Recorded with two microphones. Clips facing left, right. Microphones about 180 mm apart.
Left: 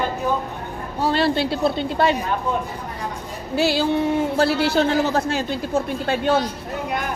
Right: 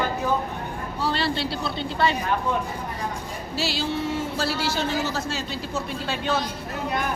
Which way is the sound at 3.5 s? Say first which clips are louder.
Left 8 dB; 55° left (ahead or behind).